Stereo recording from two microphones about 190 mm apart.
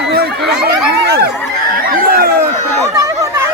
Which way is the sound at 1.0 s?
55° right (ahead or behind).